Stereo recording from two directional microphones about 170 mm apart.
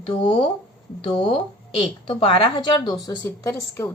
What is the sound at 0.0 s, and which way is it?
A woman's voice, 30° left (ahead or behind).